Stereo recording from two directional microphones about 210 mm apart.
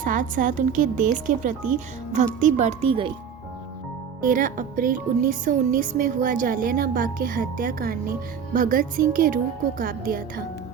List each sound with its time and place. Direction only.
0.0 s speech: 40° right (ahead or behind)
4.2 s speech: 40° right (ahead or behind)